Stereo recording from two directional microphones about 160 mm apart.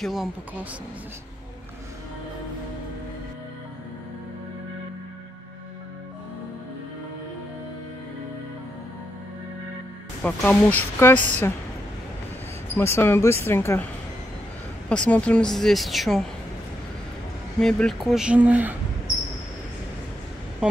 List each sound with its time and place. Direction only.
0.0 s a woman's voice: centre (ahead or behind)
10.2 s speech: 10° left (ahead or behind)
11.1 s a woman's voice: 50° right (ahead or behind)
12.7 s speech: 15° left (ahead or behind)
14.9 s a woman's voice: 5° left (ahead or behind)
17.6 s a woman's voice: 5° left (ahead or behind)